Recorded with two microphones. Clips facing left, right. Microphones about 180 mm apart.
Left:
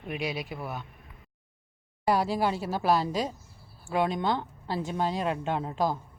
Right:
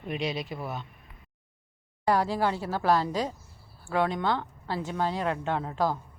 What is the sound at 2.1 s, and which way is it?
Speech, 10° left (ahead or behind).